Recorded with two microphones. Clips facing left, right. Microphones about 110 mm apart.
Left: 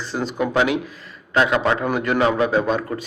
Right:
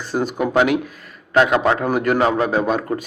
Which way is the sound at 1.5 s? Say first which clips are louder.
Right 2 dB; 40° right (ahead or behind).